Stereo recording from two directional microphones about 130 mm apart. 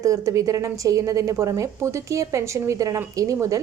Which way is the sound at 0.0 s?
25° right (ahead or behind).